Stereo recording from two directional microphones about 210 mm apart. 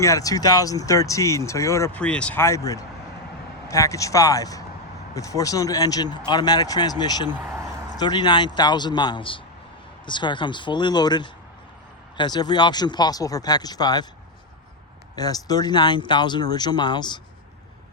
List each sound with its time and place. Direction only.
0.0 s speech: 15° left (ahead or behind)
7.3 s a sound: 10° right (ahead or behind)
7.9 s speech: 20° left (ahead or behind)
15.1 s speech: 20° left (ahead or behind)